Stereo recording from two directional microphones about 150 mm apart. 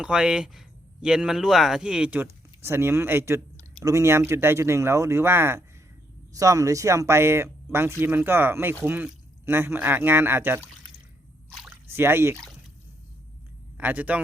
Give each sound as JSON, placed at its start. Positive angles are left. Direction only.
{"t": 0.0, "sound": "speech", "side_deg": -5}
{"t": 11.9, "sound": "speech", "side_deg": -15}
{"t": 13.7, "sound": "speech", "side_deg": -10}